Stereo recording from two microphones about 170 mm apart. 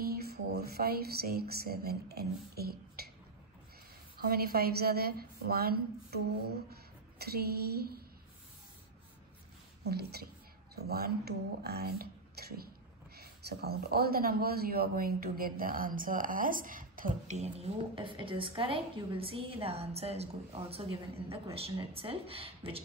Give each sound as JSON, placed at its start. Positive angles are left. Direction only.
{"t": 0.1, "sound": "speech", "side_deg": -65}
{"t": 4.2, "sound": "a woman's voice", "side_deg": -60}
{"t": 6.7, "sound": "a sound", "side_deg": -65}
{"t": 9.8, "sound": "a woman's voice", "side_deg": -70}